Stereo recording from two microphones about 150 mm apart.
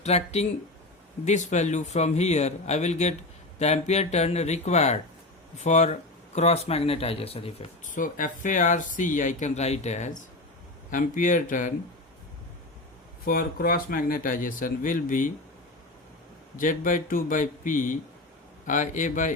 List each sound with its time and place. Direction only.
0.0 s speech: 45° left (ahead or behind)
7.9 s speech: 60° left (ahead or behind)
13.2 s speech: 70° left (ahead or behind)
16.6 s speech: 60° left (ahead or behind)